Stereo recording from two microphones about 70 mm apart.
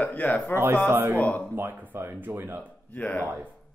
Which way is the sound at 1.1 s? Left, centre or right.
Left.